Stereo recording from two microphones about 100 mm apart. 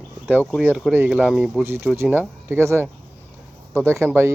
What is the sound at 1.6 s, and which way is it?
Speech, 25° right (ahead or behind).